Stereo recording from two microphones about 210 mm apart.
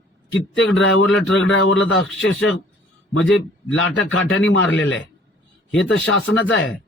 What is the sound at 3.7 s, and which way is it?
A man's voice, 70° left (ahead or behind).